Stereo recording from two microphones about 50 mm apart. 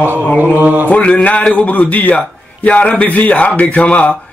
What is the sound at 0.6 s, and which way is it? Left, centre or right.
Mantra, right.